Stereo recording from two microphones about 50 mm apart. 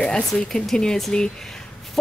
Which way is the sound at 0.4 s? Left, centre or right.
Centre.